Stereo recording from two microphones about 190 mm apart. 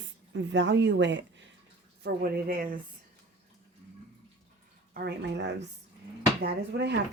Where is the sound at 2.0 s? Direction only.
55° right (ahead or behind).